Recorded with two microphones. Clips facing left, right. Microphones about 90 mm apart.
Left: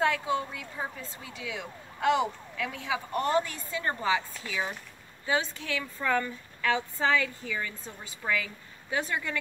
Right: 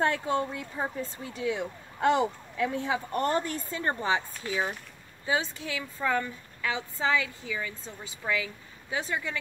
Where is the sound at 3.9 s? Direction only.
25° right (ahead or behind); by 7.7 s 10° right (ahead or behind).